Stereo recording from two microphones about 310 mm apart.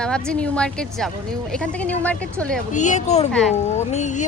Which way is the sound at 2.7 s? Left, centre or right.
Left.